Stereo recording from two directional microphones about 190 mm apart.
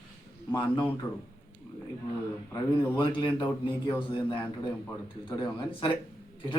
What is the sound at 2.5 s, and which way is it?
A man's voice, 25° left (ahead or behind).